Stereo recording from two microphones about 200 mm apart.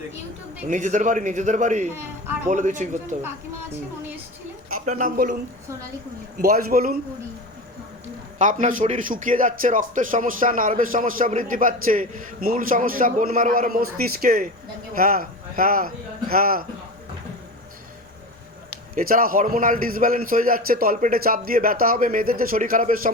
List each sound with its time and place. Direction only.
0.7 s a man's voice: 40° right (ahead or behind)
1.9 s speech: 10° right (ahead or behind)
2.5 s a man's voice: 40° right (ahead or behind)
4.9 s speech: 40° right (ahead or behind)
6.4 s speech: 45° right (ahead or behind)
8.4 s a man's voice: 40° right (ahead or behind)
18.9 s speech: 45° right (ahead or behind)